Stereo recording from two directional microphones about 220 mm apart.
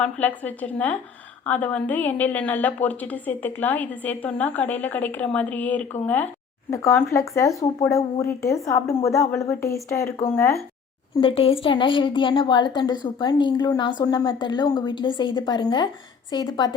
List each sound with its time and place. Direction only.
0.0 s a woman's voice: 5° left (ahead or behind)
11.2 s a woman's voice: 25° left (ahead or behind)